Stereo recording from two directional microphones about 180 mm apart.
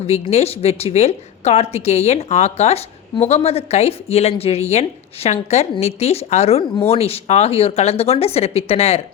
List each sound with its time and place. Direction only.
0.1 s speech: 35° left (ahead or behind)